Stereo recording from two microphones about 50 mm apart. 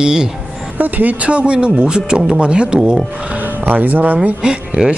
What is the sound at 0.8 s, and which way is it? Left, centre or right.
Speech, right.